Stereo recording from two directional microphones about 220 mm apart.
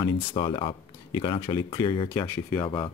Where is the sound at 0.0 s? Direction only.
20° left (ahead or behind).